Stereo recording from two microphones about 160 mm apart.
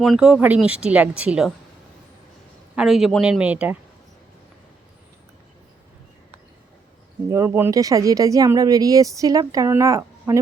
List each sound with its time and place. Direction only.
0.0 s speech: 5° right (ahead or behind)
2.7 s speech: centre (ahead or behind)
7.3 s speech: 20° right (ahead or behind)